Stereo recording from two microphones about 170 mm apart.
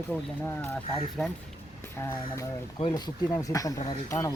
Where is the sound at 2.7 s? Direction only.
25° left (ahead or behind).